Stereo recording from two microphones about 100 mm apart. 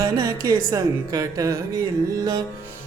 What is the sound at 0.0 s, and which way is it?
Music, 35° right (ahead or behind).